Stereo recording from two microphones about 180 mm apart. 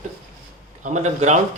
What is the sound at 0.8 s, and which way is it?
Speech, 40° right (ahead or behind).